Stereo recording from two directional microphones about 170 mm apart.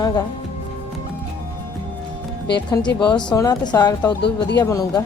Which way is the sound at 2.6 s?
25° left (ahead or behind).